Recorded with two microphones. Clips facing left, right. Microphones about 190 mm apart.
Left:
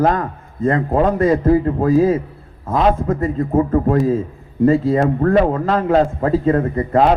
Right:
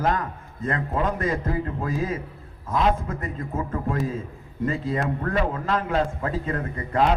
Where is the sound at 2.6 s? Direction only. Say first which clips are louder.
Left 7 dB; 65° left (ahead or behind).